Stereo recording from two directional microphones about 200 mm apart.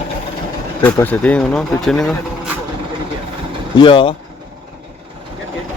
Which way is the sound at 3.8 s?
25° left (ahead or behind).